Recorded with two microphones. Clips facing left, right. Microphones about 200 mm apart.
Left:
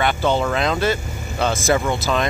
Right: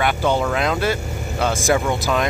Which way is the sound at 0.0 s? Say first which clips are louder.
Even; 10° right (ahead or behind).